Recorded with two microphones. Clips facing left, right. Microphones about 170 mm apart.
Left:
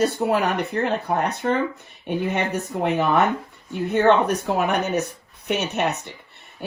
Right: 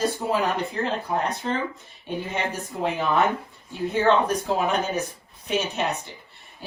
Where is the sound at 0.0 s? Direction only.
65° left (ahead or behind).